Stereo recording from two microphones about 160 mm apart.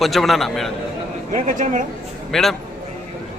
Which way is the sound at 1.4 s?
55° right (ahead or behind).